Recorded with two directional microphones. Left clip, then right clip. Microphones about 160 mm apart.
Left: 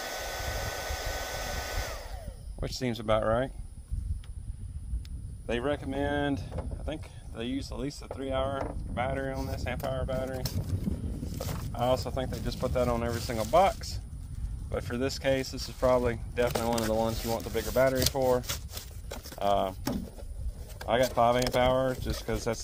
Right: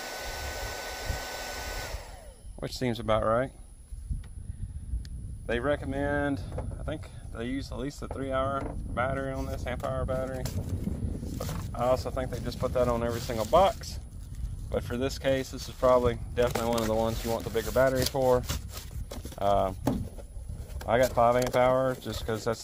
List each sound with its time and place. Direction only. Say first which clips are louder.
0.0 s hair dryer: left 1 dB; 10° left (ahead or behind)
2.6 s speech: right 1 dB; 40° right (ahead or behind)
5.5 s speech: right 2 dB; 40° right (ahead or behind)
10.4 s speech: even; centre (ahead or behind)
11.7 s a man's voice: right 1 dB; 40° right (ahead or behind); by 19.2 s 25° right (ahead or behind)
19.3 s speech: right 2 dB; 40° right (ahead or behind)
19.7 s speech: right 4 dB; 20° right (ahead or behind)
20.9 s speech: right 2 dB; 35° right (ahead or behind)